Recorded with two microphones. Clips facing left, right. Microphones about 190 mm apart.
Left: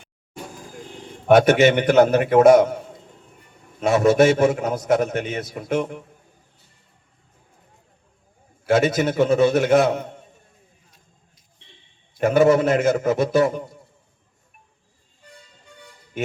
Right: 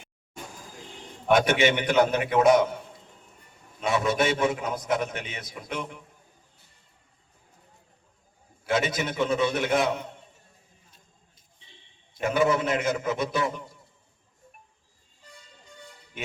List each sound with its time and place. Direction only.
1.5 s a man's voice: 45° left (ahead or behind)
8.6 s a man's voice: 50° left (ahead or behind)
12.2 s a man's voice: 50° left (ahead or behind)